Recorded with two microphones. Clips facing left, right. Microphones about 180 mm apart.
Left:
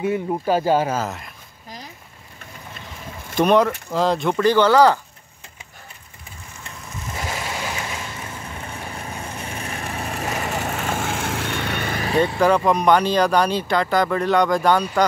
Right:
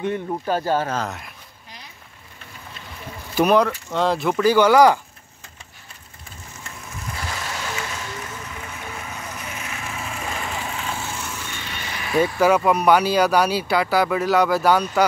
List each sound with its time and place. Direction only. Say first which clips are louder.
0.0 s speech: left 3 dB; 10° left (ahead or behind)
3.3 s speech: left 1 dB; centre (ahead or behind)
7.2 s vehicle: left 4 dB; 25° left (ahead or behind); by 11.0 s 45° left (ahead or behind)
11.0 s vehicle: left 6 dB; 90° left; by 12.0 s 60° left (ahead or behind)
12.4 s speech: right 1 dB; 5° right (ahead or behind)